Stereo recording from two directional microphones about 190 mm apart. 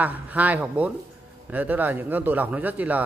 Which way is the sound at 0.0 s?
10° right (ahead or behind).